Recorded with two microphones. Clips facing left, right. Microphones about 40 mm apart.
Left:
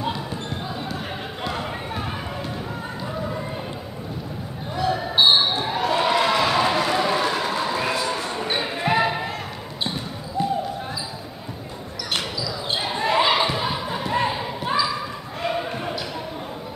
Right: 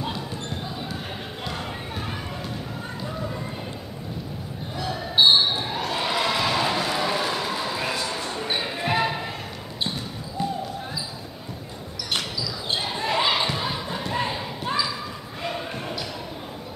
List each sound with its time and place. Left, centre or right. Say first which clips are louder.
1.4 s a sound: left 5 dB; centre
4.7 s basketball bounce: left 2 dB; centre
12.7 s basketball bounce: left 4 dB; centre